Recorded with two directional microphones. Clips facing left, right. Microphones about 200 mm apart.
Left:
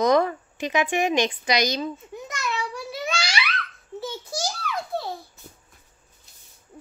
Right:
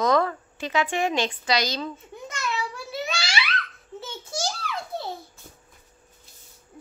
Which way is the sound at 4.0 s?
25° right (ahead or behind).